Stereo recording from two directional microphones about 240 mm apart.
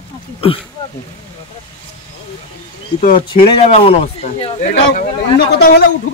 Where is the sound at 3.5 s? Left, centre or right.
Left.